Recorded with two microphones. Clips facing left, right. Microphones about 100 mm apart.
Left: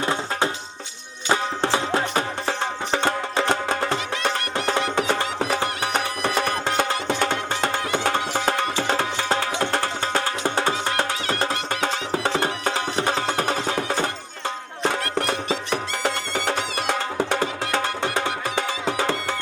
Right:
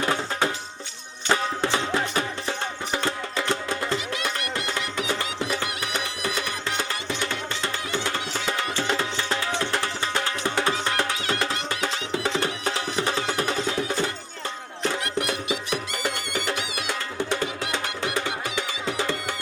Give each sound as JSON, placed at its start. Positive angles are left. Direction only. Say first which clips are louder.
{"t": 0.0, "sound": "music", "louder": "left 1 dB", "side_deg": 25}
{"t": 1.9, "sound": "music", "louder": "left 3 dB", "side_deg": 30}
{"t": 2.5, "sound": "music", "louder": "left 4 dB", "side_deg": 65}
{"t": 5.9, "sound": "music", "louder": "left 5 dB", "side_deg": 55}
{"t": 10.5, "sound": "music", "louder": "even", "side_deg": 25}
{"t": 11.7, "sound": "music", "louder": "left 3 dB", "side_deg": 50}
{"t": 16.0, "sound": "music", "louder": "left 4 dB", "side_deg": 50}